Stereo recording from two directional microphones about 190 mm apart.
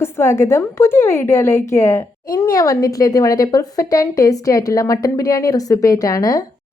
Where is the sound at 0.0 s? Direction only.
15° left (ahead or behind).